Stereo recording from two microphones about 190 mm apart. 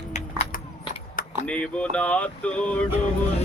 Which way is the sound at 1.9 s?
5° left (ahead or behind).